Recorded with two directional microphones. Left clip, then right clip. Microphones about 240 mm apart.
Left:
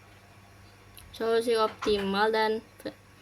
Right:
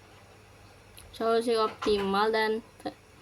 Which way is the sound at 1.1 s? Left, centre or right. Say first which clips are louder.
Even; centre.